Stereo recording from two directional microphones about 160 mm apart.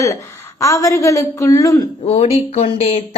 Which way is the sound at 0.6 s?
20° left (ahead or behind).